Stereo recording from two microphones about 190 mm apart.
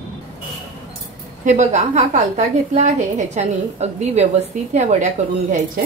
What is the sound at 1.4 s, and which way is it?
A woman's voice, 40° right (ahead or behind).